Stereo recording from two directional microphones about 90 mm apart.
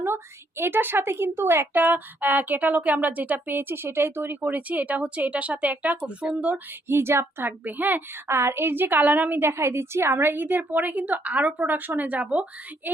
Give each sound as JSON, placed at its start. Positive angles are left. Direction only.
{"t": 0.0, "sound": "a woman's voice", "side_deg": -25}
{"t": 6.9, "sound": "a woman's voice", "side_deg": -30}